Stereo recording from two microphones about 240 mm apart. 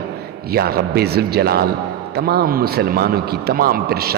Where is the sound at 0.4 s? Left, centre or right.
Right.